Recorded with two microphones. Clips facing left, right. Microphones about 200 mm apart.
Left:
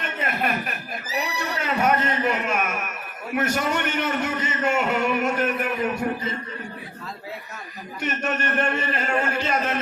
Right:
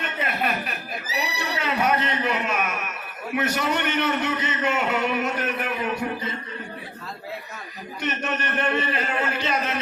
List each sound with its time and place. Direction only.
0.2 s a sound: 45° left (ahead or behind)
3.3 s a man's voice: 50° left (ahead or behind)
8.0 s a man's voice: 45° left (ahead or behind)